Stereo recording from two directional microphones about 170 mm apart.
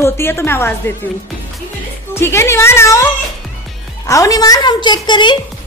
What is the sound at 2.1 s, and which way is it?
Speech, 15° left (ahead or behind).